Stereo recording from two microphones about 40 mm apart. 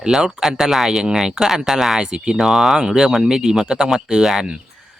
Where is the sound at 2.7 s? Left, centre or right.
Centre.